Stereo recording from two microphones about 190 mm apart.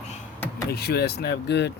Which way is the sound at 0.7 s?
55° left (ahead or behind).